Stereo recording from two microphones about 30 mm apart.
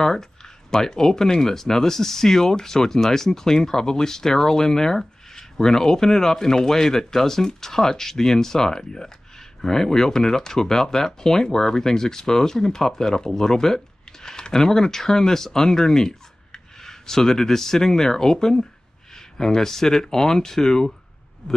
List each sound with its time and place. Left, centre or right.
0.0 s speech: centre